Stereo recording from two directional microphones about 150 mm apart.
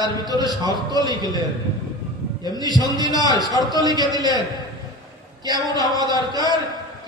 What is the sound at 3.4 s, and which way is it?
Speech, 25° left (ahead or behind).